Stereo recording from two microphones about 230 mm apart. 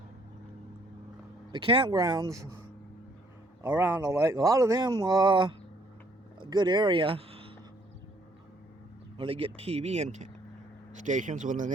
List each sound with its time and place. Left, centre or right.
1.5 s speech: right
3.6 s speech: centre; by 7.5 s right
9.1 s a man's voice: right